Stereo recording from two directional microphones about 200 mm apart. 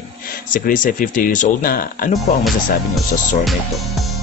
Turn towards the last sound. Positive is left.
turn(degrees=0)  # may be behind; listen again after turning